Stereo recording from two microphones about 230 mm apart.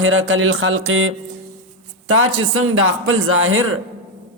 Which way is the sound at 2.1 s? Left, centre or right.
Right.